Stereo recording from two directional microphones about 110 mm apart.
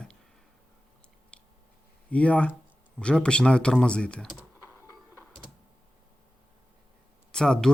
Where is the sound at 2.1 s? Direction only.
10° left (ahead or behind).